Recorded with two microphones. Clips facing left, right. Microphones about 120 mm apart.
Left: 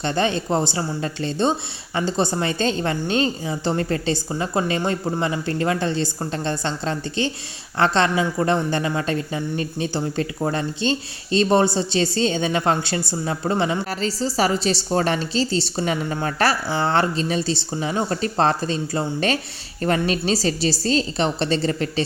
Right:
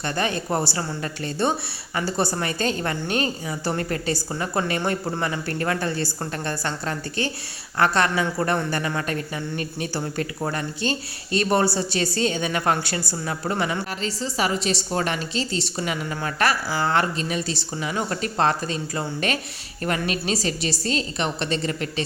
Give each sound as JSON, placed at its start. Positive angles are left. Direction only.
{"t": 0.0, "sound": "a woman's voice", "side_deg": 25}